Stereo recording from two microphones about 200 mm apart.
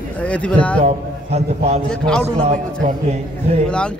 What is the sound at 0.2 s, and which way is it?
Speech, 5° left (ahead or behind).